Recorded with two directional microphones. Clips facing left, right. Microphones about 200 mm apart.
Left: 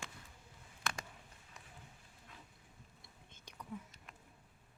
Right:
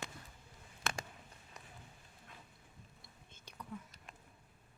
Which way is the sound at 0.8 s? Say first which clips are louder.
Right 2 dB; 25° right (ahead or behind).